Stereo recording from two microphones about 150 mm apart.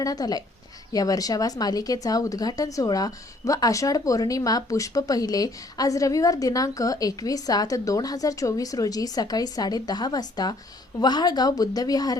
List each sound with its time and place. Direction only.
0.0 s speech: 25° left (ahead or behind)